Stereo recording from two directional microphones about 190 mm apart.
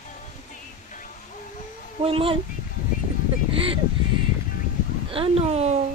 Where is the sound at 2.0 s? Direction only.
30° right (ahead or behind).